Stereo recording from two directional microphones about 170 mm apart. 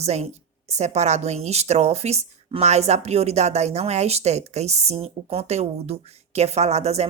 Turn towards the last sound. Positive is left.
turn(degrees=-40)  # may be behind; listen again after turning